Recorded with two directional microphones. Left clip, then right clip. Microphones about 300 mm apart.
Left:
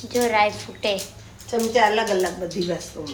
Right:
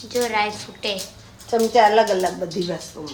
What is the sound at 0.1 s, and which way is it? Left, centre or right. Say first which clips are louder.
Speech: left 2 dB; centre.